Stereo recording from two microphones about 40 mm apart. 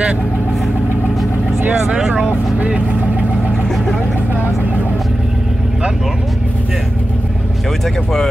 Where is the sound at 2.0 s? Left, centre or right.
Centre.